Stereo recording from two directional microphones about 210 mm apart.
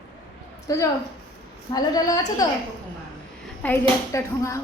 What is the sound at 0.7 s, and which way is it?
A woman's voice, 15° left (ahead or behind).